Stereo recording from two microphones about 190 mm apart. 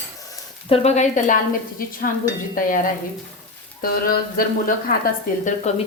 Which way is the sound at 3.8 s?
50° left (ahead or behind).